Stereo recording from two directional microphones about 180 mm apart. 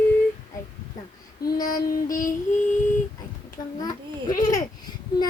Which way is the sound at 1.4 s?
55° left (ahead or behind).